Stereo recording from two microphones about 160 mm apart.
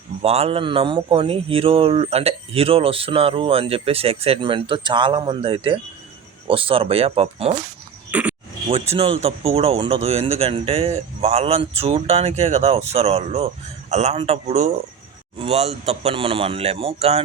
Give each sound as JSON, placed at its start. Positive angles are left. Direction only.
{"t": 0.2, "sound": "speech", "side_deg": -40}
{"t": 8.1, "sound": "a sound", "side_deg": -10}
{"t": 8.7, "sound": "a man's voice", "side_deg": -35}